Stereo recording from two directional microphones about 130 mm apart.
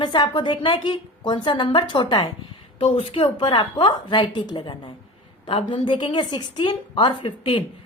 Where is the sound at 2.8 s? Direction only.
45° left (ahead or behind).